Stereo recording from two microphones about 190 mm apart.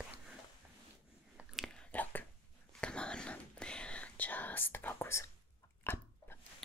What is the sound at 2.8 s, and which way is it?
Whispering, 5° left (ahead or behind).